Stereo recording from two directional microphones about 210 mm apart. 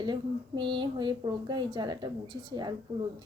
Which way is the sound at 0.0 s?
20° right (ahead or behind).